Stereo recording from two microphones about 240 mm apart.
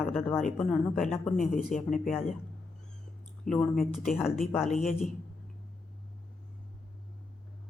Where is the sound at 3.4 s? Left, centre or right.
Centre.